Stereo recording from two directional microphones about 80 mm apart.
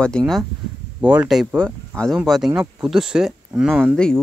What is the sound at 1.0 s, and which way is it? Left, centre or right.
Speech, centre.